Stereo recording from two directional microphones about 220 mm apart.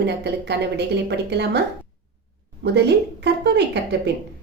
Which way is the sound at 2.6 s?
50° right (ahead or behind).